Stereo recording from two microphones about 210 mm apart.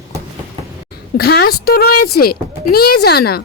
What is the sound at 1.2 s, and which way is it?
Speech, 50° left (ahead or behind).